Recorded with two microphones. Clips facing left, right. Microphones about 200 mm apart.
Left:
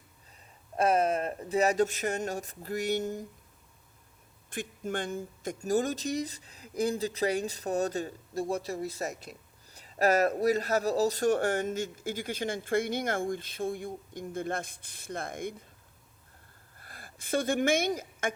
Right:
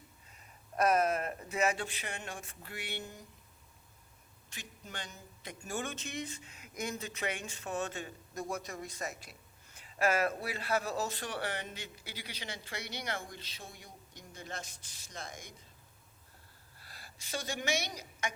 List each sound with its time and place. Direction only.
0.8 s speech: 30° left (ahead or behind); by 3.2 s 45° left (ahead or behind)
4.4 s speech: 50° left (ahead or behind)
16.7 s a woman's voice: 50° left (ahead or behind)